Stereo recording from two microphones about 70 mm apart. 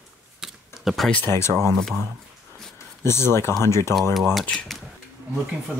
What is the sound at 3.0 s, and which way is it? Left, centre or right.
Speech, left.